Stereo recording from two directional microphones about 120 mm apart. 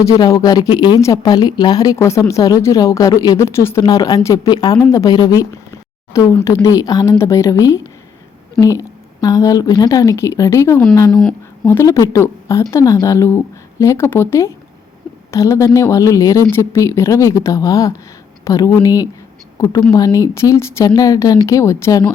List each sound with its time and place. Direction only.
0.2 s a woman's voice: 30° left (ahead or behind)
3.8 s a woman's voice: 30° left (ahead or behind)